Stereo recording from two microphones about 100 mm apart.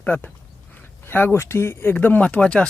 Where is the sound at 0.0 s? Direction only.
20° left (ahead or behind).